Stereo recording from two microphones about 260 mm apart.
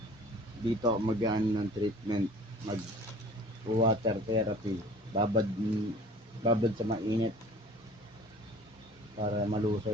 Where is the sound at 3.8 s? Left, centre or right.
Centre.